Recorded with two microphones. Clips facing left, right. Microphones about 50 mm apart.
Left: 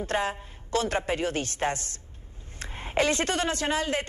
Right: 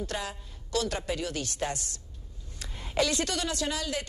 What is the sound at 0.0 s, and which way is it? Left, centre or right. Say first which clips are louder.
A woman's voice: left 7 dB; left.